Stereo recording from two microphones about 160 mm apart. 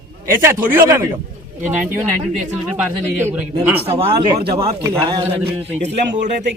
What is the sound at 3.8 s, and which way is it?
Speech, 40° right (ahead or behind).